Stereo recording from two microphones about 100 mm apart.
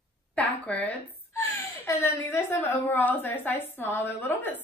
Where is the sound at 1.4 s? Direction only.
30° left (ahead or behind).